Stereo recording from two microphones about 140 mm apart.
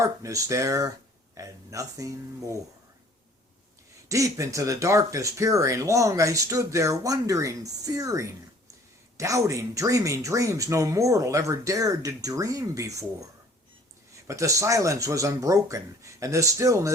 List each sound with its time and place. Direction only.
0.0 s speech: 20° right (ahead or behind)
4.1 s speech: 20° right (ahead or behind)
14.3 s speech: 20° right (ahead or behind)